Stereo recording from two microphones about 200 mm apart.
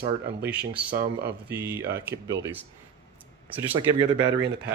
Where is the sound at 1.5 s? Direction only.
10° right (ahead or behind).